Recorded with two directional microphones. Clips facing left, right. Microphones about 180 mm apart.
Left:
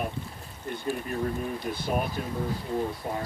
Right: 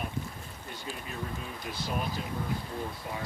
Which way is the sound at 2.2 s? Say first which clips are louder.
Left 4 dB; 50° left (ahead or behind).